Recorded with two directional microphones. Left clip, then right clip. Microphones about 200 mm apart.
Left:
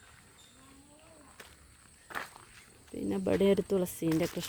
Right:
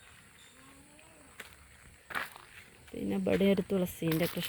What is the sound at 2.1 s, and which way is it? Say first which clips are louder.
Walk: right 3 dB; 20° right (ahead or behind).